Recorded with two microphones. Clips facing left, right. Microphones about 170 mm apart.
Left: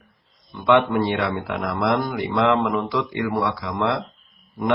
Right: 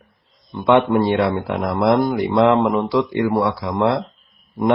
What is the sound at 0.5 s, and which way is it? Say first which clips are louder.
Speech: right 3 dB; 30° right (ahead or behind).